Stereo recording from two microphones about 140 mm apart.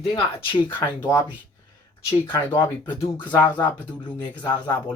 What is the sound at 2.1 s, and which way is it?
Speech, 30° left (ahead or behind).